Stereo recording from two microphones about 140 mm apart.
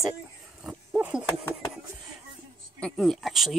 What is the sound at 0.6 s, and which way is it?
Dog, 5° right (ahead or behind).